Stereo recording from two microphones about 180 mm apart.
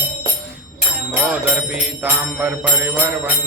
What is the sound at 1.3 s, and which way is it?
Music, 5° right (ahead or behind).